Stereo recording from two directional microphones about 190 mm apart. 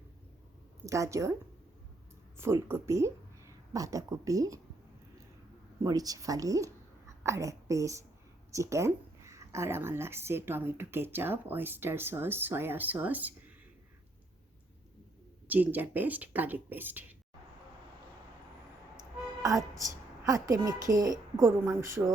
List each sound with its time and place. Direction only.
0.9 s speech: 15° right (ahead or behind)
2.4 s a woman's voice: 10° right (ahead or behind)
5.8 s a child's voice: 20° right (ahead or behind)
15.4 s speech: 10° right (ahead or behind)
19.4 s speech: 20° right (ahead or behind)